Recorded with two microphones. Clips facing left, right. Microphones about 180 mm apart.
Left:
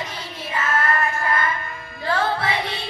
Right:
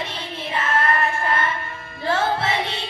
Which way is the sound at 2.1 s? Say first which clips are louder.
Right 1 dB; 25° right (ahead or behind).